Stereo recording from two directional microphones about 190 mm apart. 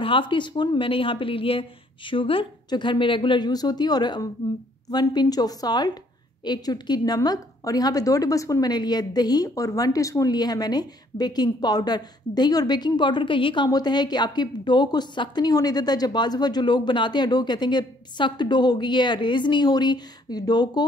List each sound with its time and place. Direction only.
0.0 s a woman's voice: 25° left (ahead or behind)